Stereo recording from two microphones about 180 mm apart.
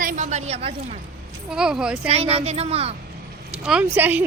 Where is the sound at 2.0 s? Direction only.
35° right (ahead or behind).